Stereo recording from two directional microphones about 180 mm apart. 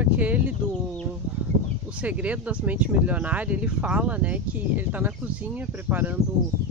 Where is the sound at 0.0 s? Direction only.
10° right (ahead or behind).